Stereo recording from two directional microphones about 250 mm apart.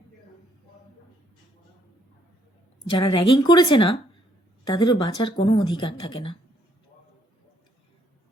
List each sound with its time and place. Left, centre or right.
2.9 s speech: centre